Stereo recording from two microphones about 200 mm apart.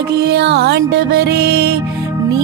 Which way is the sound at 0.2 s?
55° right (ahead or behind).